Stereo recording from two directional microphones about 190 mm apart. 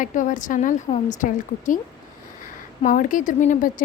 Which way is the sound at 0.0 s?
45° left (ahead or behind).